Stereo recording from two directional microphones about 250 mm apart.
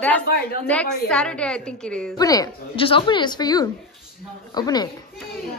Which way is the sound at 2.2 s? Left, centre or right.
Centre.